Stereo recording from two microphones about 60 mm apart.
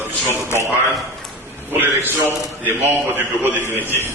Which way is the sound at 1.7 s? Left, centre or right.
Right.